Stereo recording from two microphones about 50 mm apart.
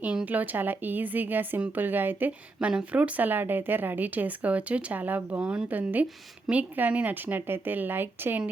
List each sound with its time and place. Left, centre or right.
0.3 s speech: right
2.6 s speech: right
5.4 s a woman's voice: centre
5.6 s speech: right